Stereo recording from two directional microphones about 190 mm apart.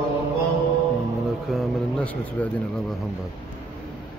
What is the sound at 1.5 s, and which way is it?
Speech, centre (ahead or behind).